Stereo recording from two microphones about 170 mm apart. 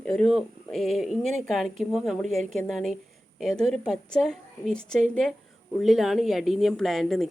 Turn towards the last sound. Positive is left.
turn(degrees=0)  # may be behind; listen again after turning